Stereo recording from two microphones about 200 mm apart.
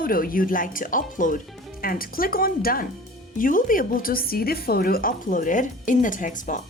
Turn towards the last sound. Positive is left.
turn(degrees=40)  # may be behind; listen again after turning